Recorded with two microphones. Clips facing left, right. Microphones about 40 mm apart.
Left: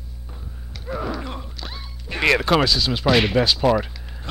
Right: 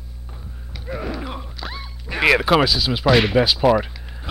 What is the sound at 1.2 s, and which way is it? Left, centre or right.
Speech, centre.